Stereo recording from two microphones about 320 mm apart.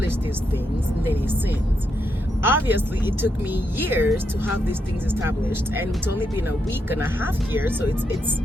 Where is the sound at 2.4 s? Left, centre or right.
Centre.